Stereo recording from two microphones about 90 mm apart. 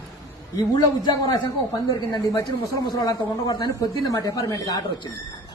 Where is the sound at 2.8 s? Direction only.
55° left (ahead or behind).